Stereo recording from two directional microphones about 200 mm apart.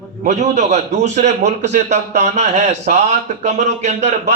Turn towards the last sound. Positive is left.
turn(degrees=-35)  # may be behind; listen again after turning